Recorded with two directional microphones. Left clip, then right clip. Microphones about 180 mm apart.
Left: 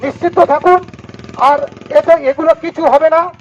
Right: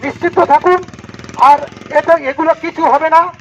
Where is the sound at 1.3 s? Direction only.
50° left (ahead or behind).